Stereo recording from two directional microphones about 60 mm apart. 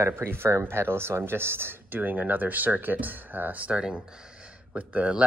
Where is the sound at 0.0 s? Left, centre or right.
Right.